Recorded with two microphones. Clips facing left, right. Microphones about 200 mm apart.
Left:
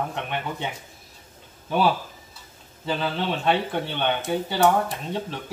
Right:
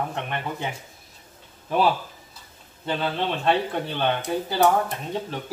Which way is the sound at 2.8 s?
Centre (ahead or behind).